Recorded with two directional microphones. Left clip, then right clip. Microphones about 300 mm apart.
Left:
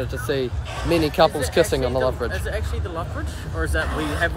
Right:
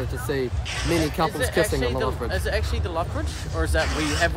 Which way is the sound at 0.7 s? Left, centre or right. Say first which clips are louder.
Left 3 dB; centre.